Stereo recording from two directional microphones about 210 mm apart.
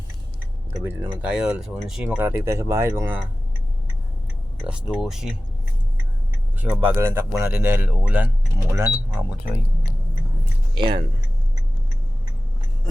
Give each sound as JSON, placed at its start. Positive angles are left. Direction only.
{"t": 0.9, "sound": "speech", "side_deg": -5}
{"t": 4.7, "sound": "speech", "side_deg": 0}
{"t": 6.6, "sound": "speech", "side_deg": -10}
{"t": 10.8, "sound": "speech", "side_deg": -25}